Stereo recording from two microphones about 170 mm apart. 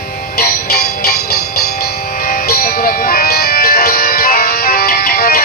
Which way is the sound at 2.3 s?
65° left (ahead or behind).